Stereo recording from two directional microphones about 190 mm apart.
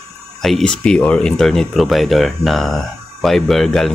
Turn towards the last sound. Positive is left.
turn(degrees=0)  # may be behind; listen again after turning